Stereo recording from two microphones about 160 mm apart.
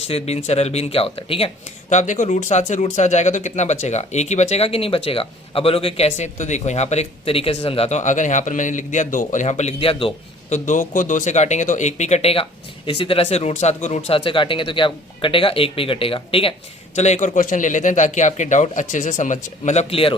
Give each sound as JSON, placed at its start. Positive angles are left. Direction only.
{"t": 0.1, "sound": "speech", "side_deg": 40}
{"t": 1.9, "sound": "speech", "side_deg": 50}
{"t": 10.5, "sound": "speech", "side_deg": 50}